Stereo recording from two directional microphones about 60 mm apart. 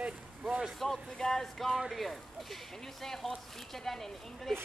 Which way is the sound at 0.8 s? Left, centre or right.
Centre.